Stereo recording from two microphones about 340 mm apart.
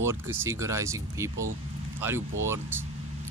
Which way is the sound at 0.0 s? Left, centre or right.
Centre.